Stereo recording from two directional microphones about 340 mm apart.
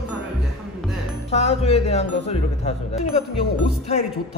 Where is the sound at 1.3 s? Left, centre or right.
Centre.